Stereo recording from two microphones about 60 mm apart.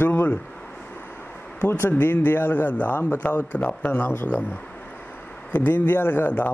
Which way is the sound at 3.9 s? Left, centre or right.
Left.